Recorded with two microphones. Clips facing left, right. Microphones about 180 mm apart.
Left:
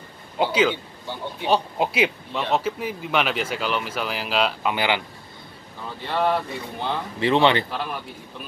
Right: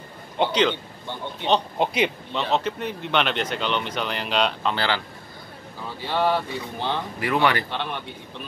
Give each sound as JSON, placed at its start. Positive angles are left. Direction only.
{"t": 0.4, "sound": "a man's voice", "side_deg": 5}
{"t": 4.7, "sound": "a man's voice", "side_deg": 15}
{"t": 5.9, "sound": "a man's voice", "side_deg": 0}
{"t": 7.2, "sound": "speech", "side_deg": 25}
{"t": 7.7, "sound": "a man's voice", "side_deg": 0}